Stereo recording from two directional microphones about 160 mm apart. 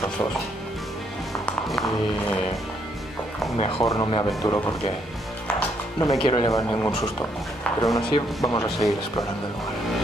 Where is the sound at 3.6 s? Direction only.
35° left (ahead or behind).